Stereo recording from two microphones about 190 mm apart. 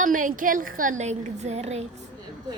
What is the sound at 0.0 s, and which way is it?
A woman's voice, 45° right (ahead or behind).